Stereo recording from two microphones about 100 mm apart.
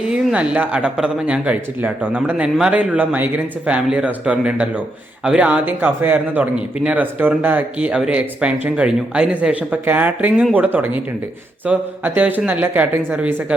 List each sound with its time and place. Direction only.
0.1 s speech: 10° right (ahead or behind)